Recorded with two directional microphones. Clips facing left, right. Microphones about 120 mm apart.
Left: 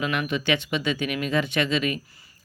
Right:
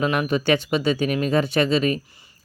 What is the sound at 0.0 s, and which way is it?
Speech, 40° right (ahead or behind).